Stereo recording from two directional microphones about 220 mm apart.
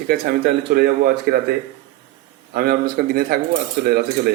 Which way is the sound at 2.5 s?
45° right (ahead or behind).